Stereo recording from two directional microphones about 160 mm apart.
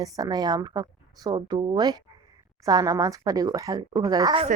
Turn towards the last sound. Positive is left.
turn(degrees=-25)  # may be behind; listen again after turning